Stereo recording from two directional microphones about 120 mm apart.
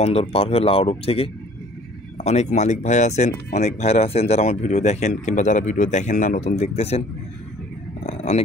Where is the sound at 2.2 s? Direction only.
70° left (ahead or behind).